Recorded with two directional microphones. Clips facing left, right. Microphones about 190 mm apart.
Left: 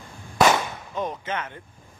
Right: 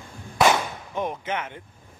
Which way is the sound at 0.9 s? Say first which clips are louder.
Right 1 dB; 15° right (ahead or behind).